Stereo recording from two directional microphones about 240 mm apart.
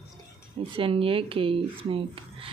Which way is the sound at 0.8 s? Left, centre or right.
Right.